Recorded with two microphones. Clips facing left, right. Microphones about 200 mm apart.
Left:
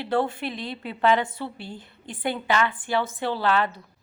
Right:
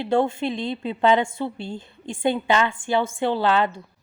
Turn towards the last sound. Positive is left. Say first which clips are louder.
# right 3 dB
turn(degrees=-25)  # may be behind; listen again after turning